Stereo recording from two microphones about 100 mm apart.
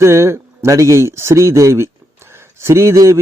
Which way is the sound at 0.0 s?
30° right (ahead or behind).